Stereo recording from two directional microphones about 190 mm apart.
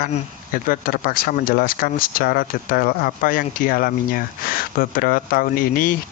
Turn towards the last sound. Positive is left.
turn(degrees=50)  # may be behind; listen again after turning